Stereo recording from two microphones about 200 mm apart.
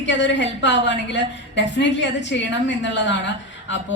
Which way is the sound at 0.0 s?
60° left (ahead or behind).